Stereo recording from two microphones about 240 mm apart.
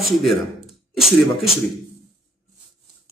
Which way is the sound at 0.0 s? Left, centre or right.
Centre.